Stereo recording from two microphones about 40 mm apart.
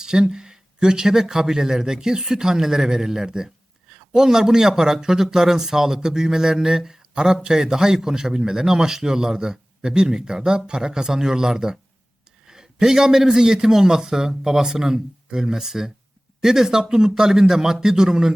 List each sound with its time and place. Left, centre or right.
0.0 s speech: centre